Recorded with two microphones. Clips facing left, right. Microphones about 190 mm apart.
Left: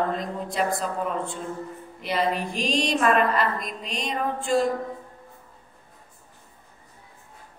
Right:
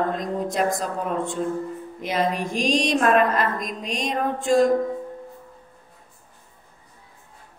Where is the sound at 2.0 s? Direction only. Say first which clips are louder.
Right 1 dB; 45° right (ahead or behind).